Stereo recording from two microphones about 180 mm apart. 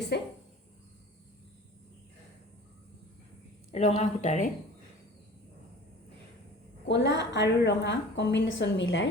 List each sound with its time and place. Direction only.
0.1 s speech: 65° left (ahead or behind)
3.7 s speech: 40° left (ahead or behind)
6.8 s a woman's voice: 80° left